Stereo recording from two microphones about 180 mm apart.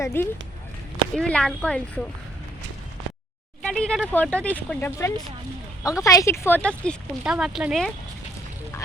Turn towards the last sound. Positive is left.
turn(degrees=0)  # may be behind; listen again after turning